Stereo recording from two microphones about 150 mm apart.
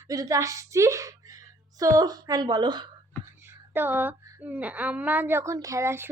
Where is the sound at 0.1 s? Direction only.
25° right (ahead or behind).